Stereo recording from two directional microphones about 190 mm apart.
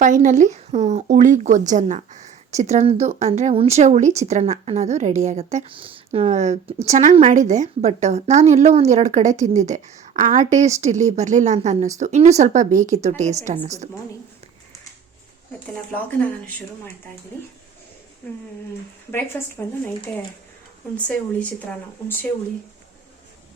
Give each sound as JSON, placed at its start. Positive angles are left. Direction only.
{"t": 0.0, "sound": "a woman's voice", "side_deg": -40}
{"t": 15.6, "sound": "speech", "side_deg": 5}
{"t": 19.6, "sound": "speech", "side_deg": 10}
{"t": 20.9, "sound": "speech", "side_deg": 5}